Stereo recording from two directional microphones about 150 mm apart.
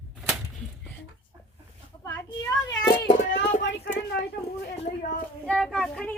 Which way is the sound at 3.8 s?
90° left.